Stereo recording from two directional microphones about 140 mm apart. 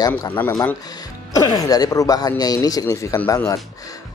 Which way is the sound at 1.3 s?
25° left (ahead or behind).